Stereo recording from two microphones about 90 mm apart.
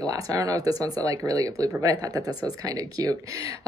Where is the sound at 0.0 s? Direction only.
40° right (ahead or behind).